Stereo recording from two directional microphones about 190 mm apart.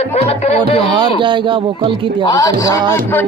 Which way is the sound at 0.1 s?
35° left (ahead or behind).